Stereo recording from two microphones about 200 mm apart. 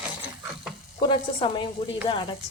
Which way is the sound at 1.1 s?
25° left (ahead or behind).